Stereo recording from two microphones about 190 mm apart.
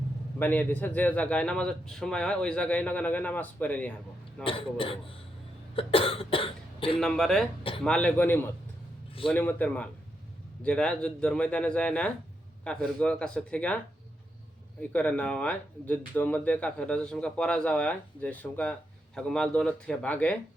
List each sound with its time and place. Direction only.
0.3 s speech: 10° left (ahead or behind)
4.4 s a man's voice: 30° left (ahead or behind)
7.0 s speech: 5° left (ahead or behind)
14.8 s speech: 5° left (ahead or behind)